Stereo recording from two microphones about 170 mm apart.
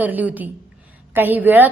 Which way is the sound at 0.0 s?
10° right (ahead or behind).